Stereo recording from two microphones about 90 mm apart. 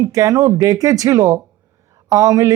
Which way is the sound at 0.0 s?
40° right (ahead or behind).